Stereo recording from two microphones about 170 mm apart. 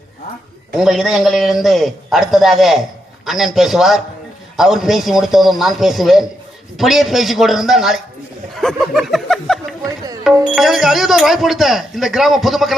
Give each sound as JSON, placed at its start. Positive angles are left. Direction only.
{"t": 0.8, "sound": "speech", "side_deg": 0}